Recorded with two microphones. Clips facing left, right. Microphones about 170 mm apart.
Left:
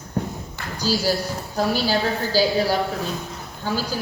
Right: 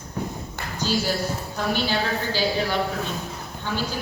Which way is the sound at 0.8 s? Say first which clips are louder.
Left 2 dB; 40° left (ahead or behind).